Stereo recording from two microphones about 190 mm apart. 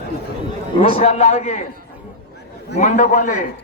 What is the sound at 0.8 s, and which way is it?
Speech, 30° left (ahead or behind).